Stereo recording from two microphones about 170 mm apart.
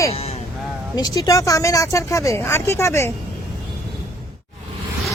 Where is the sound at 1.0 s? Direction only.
20° left (ahead or behind).